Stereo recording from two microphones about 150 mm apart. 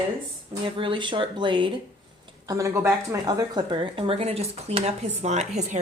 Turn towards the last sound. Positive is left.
turn(degrees=-50)  # may be behind; listen again after turning